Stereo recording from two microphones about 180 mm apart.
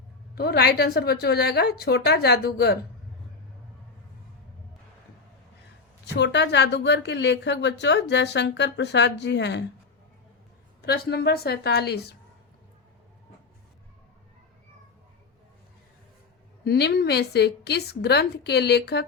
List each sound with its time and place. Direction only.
0.3 s a woman's voice: 60° left (ahead or behind)
6.1 s a woman's voice: 75° left (ahead or behind)
10.8 s a woman's voice: 60° left (ahead or behind)
16.6 s a woman's voice: 65° left (ahead or behind)